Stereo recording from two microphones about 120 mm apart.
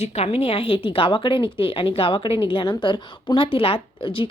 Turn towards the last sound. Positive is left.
turn(degrees=45)  # may be behind; listen again after turning